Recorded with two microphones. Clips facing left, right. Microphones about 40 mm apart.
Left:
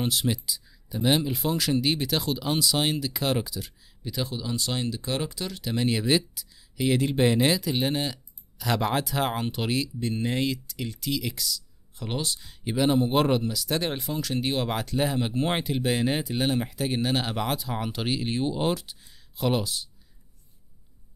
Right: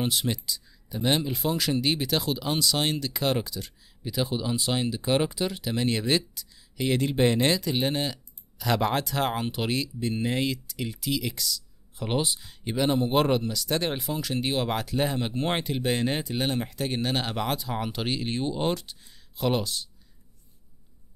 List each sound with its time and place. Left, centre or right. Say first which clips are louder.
0.0 s speech: left 1 dB; centre
5.6 s speech: left 5 dB; centre
12.0 s speech: right 3 dB; centre
12.4 s speech: left 1 dB; centre